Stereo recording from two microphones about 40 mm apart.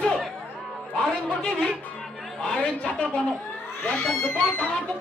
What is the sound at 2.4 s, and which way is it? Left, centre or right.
Speech, centre.